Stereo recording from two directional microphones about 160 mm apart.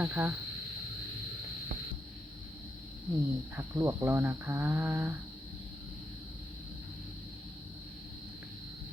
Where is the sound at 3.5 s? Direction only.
20° right (ahead or behind).